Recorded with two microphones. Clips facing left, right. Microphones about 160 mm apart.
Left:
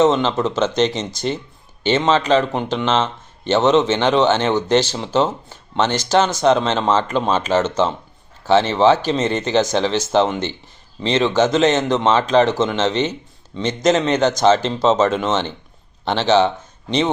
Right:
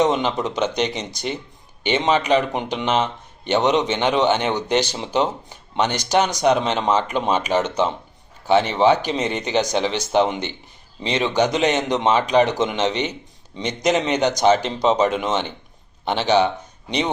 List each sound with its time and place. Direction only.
0.0 s speech: 15° right (ahead or behind)
11.5 s speech: 15° right (ahead or behind)